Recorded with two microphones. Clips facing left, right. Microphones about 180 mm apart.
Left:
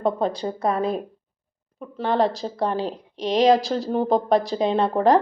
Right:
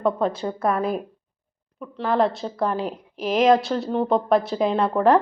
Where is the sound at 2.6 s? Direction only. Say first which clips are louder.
Even; 30° left (ahead or behind).